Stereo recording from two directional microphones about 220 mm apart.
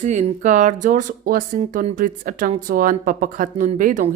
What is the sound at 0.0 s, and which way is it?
Speech, 30° right (ahead or behind).